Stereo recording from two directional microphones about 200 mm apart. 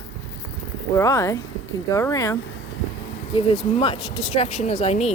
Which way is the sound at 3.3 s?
25° left (ahead or behind).